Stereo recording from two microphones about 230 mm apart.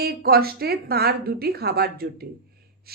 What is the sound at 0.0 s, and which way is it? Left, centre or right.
A woman's voice, right.